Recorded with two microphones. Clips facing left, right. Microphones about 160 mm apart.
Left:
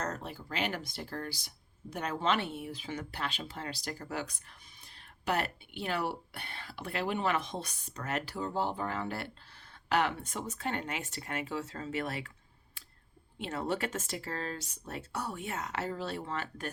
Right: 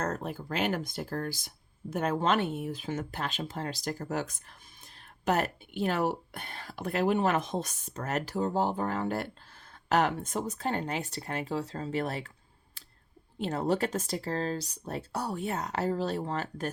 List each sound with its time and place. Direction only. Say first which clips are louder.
0.0 s speech: right 5 dB; 50° right (ahead or behind)
13.4 s speech: right 5 dB; 40° right (ahead or behind)